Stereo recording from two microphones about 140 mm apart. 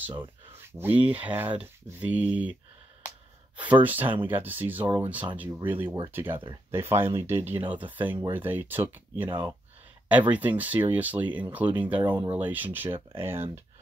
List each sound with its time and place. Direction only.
0.7 s speech: 15° right (ahead or behind)
3.8 s speech: 10° right (ahead or behind)
6.3 s speech: 35° right (ahead or behind)
6.7 s speech: 15° right (ahead or behind)